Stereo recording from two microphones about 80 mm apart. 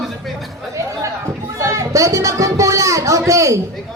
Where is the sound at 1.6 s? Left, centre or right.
Right.